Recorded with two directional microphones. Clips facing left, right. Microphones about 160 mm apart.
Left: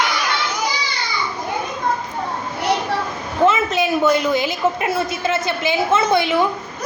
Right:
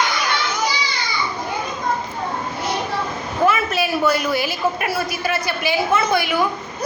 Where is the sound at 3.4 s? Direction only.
20° left (ahead or behind).